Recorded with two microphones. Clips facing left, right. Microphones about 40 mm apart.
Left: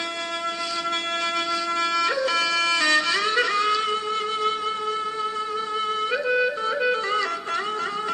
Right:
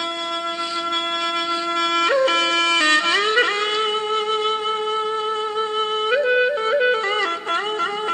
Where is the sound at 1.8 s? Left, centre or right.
Right.